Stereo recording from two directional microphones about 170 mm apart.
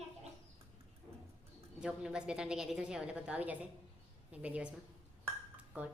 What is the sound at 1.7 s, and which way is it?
A woman's voice, 5° right (ahead or behind).